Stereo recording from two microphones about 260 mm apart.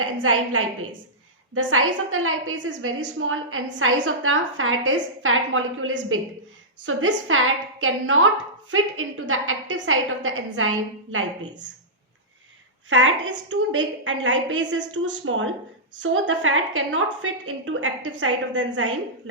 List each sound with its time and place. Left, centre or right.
0.0 s a woman's voice: right
12.9 s a woman's voice: right